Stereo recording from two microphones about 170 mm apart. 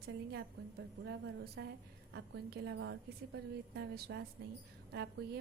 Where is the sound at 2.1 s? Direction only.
75° right (ahead or behind).